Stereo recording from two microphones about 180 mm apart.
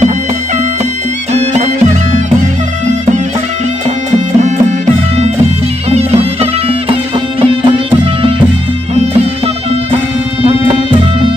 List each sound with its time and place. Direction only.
1.3 s music: 40° right (ahead or behind)
5.9 s music: 35° right (ahead or behind)